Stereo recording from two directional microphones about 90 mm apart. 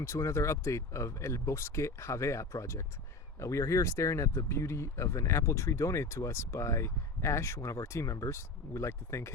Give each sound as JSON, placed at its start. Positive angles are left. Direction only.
{"t": 0.0, "sound": "speech", "side_deg": 30}